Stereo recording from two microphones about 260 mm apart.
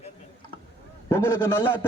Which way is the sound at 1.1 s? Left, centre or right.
Centre.